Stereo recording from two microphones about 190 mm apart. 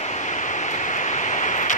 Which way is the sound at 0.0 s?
40° left (ahead or behind).